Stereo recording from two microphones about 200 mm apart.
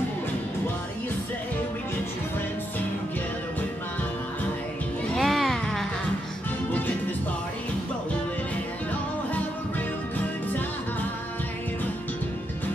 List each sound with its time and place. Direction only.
5.1 s music: centre (ahead or behind)
10.1 s music: 10° left (ahead or behind)